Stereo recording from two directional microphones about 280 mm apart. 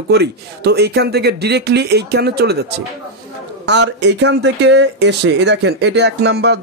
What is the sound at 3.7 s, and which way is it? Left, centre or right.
Speech, right.